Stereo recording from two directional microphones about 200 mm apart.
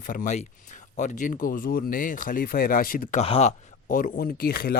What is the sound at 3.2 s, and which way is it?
Speech, 30° left (ahead or behind).